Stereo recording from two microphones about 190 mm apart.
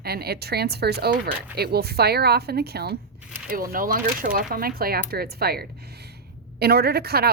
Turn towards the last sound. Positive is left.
turn(degrees=-55)  # may be behind; listen again after turning